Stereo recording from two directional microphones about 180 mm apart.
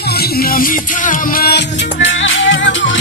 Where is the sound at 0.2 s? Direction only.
55° left (ahead or behind).